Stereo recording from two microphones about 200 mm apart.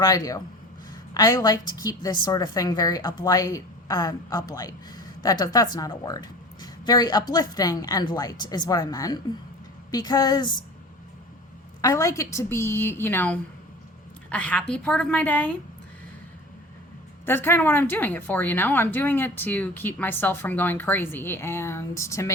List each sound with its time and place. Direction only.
0.0 s a woman's voice: 15° left (ahead or behind)
11.8 s a woman's voice: 15° left (ahead or behind)
17.2 s a woman's voice: 10° left (ahead or behind)